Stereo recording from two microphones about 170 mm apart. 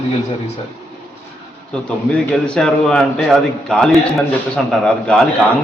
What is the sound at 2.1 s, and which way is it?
A man's voice, 5° left (ahead or behind).